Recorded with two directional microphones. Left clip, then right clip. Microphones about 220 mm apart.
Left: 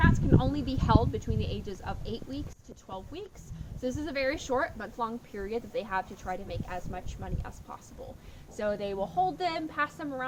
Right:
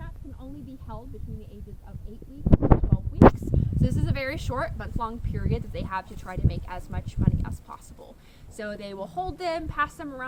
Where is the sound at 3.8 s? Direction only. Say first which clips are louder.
Left 2 dB; 45° right (ahead or behind).